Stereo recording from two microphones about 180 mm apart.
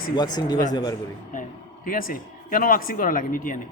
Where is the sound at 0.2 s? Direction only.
20° left (ahead or behind).